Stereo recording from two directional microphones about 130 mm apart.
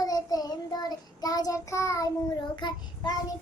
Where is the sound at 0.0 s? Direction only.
25° left (ahead or behind).